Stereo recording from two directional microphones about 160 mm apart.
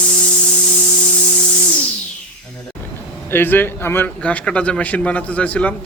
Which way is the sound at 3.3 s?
15° left (ahead or behind).